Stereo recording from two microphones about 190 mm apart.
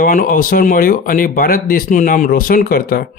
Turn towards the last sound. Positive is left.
turn(degrees=50)  # may be behind; listen again after turning